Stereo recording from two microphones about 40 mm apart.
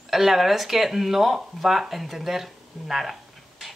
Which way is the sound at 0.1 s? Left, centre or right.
Centre.